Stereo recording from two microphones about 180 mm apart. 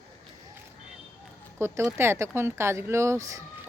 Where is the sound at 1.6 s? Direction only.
15° right (ahead or behind).